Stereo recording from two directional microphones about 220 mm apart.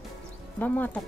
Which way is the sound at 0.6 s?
5° left (ahead or behind).